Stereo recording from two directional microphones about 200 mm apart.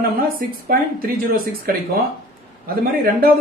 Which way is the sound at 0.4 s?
45° right (ahead or behind).